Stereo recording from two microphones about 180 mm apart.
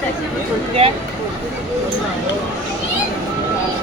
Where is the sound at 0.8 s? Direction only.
30° right (ahead or behind).